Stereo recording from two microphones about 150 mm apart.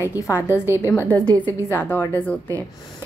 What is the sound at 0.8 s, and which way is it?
A woman's voice, 15° left (ahead or behind).